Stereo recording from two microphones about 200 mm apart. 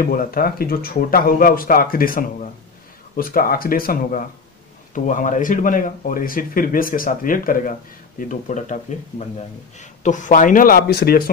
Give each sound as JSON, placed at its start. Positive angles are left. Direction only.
{"t": 0.0, "sound": "a man's voice", "side_deg": 45}
{"t": 9.8, "sound": "a man's voice", "side_deg": 40}